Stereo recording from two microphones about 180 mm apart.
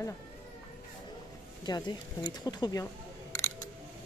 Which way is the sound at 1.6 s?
25° left (ahead or behind).